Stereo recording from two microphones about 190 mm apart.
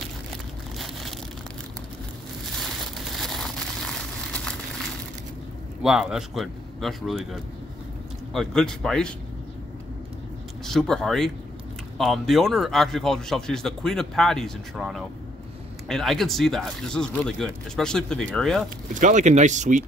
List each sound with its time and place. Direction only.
3.1 s vehicle: centre (ahead or behind)
5.8 s speech: 5° right (ahead or behind)
8.3 s speech: centre (ahead or behind)
10.6 s speech: centre (ahead or behind)
18.9 s speech: 40° right (ahead or behind)